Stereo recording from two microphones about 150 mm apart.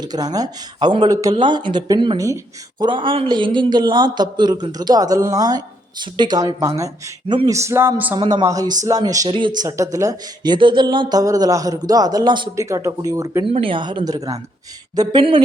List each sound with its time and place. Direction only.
0.0 s speech: 25° right (ahead or behind)
8.3 s speech: 25° right (ahead or behind)
13.5 s speech: 35° right (ahead or behind)